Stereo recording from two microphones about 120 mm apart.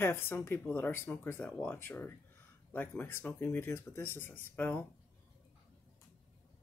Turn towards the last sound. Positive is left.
turn(degrees=20)  # may be behind; listen again after turning